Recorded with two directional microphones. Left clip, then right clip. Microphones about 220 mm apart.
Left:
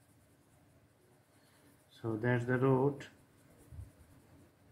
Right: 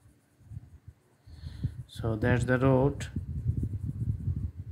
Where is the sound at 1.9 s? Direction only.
45° right (ahead or behind).